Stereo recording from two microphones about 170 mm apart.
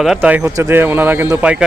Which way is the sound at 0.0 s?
5° right (ahead or behind).